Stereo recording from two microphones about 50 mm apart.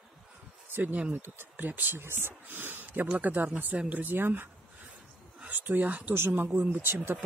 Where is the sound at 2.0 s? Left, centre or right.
Right.